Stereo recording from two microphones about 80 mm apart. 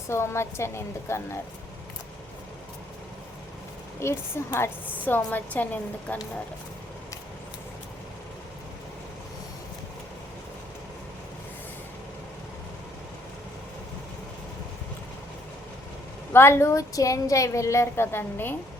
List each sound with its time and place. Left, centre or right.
0.1 s a woman's voice: left
4.0 s a woman's voice: left
16.3 s a woman's voice: left